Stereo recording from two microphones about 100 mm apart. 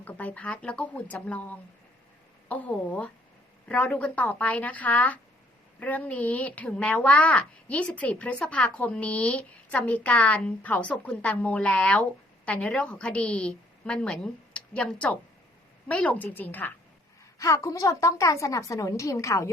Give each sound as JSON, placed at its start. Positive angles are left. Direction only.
{"t": 0.0, "sound": "speech", "side_deg": 15}
{"t": 17.3, "sound": "a woman's voice", "side_deg": 35}